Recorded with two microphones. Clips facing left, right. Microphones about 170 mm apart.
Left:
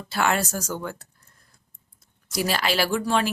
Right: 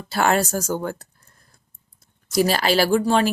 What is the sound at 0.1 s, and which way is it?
Speech, 40° right (ahead or behind).